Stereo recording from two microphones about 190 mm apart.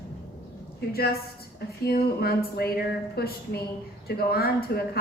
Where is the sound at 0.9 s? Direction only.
55° left (ahead or behind).